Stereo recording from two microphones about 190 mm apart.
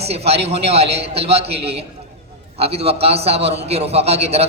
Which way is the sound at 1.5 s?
60° right (ahead or behind).